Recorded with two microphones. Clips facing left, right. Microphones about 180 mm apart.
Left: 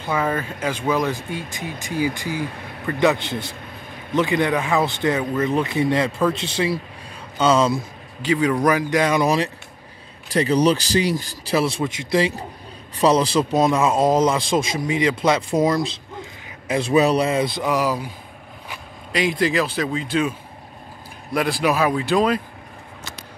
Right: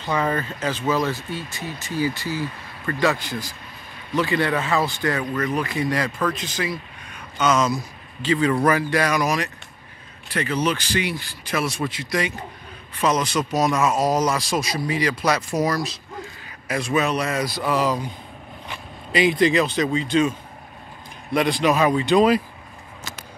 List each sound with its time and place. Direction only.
0.0 s speech: 5° left (ahead or behind); by 7.7 s 30° left (ahead or behind)
8.2 s speech: 10° left (ahead or behind)